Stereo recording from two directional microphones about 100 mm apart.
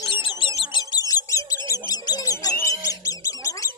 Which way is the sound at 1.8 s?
40° left (ahead or behind).